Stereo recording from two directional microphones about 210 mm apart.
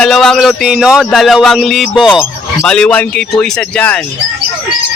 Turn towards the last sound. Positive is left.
turn(degrees=5)  # may be behind; listen again after turning